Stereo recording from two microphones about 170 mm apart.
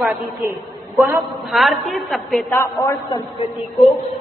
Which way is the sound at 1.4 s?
Centre (ahead or behind).